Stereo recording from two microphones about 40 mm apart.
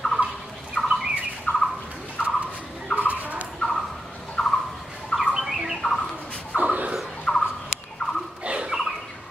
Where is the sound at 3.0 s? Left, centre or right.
Right.